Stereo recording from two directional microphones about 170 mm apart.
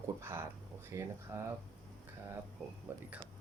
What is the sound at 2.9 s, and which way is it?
Speech, 10° right (ahead or behind).